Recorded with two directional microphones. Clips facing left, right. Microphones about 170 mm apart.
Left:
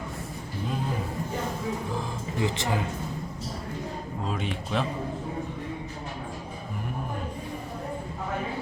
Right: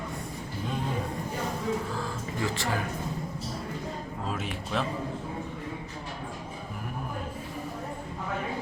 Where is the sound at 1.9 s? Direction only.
20° left (ahead or behind).